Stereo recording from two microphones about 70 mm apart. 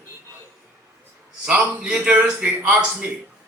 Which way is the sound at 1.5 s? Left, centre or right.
Centre.